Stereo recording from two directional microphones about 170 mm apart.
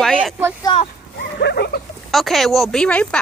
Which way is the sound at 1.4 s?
70° left (ahead or behind).